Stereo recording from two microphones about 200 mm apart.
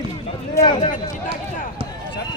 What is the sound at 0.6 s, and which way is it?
Speech, 25° left (ahead or behind).